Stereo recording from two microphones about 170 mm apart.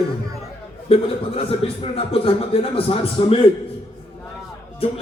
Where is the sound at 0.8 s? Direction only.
35° left (ahead or behind).